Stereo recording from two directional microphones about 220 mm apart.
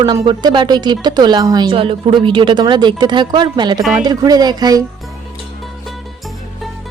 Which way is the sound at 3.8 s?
Centre (ahead or behind).